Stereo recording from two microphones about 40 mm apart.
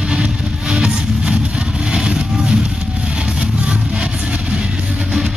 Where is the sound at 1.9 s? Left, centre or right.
Right.